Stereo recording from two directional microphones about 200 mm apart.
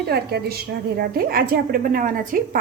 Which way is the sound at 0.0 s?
55° right (ahead or behind).